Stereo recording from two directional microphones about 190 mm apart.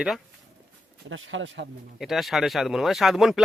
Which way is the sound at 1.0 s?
90° right.